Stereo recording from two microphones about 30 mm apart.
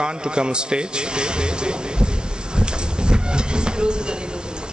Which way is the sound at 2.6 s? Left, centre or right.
Right.